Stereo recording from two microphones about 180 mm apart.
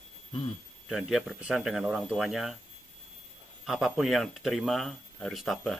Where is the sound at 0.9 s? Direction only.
Centre (ahead or behind).